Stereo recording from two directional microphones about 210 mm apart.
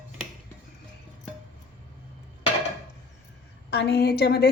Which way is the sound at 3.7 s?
50° left (ahead or behind).